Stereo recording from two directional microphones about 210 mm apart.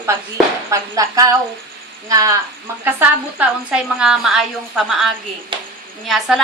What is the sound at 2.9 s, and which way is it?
A woman's voice, 5° right (ahead or behind).